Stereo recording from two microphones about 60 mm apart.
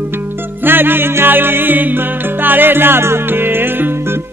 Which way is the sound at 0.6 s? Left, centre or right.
Right.